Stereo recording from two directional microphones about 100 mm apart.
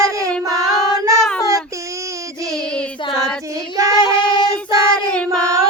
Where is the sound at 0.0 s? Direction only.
35° right (ahead or behind).